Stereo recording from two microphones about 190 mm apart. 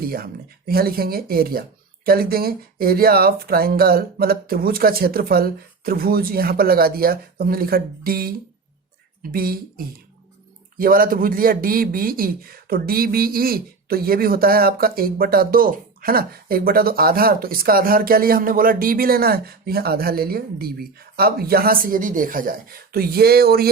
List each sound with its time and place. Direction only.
0.7 s a man's voice: 55° right (ahead or behind)